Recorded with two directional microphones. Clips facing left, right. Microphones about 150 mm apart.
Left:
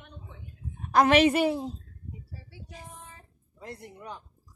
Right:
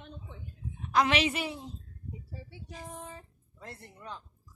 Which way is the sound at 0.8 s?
45° left (ahead or behind).